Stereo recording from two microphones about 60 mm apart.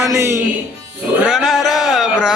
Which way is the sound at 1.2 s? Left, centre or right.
Centre.